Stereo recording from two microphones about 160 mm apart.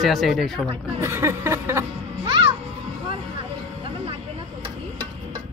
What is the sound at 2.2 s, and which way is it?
Music, 30° right (ahead or behind).